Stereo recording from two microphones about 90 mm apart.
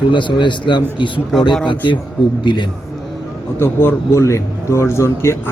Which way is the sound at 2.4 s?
60° left (ahead or behind).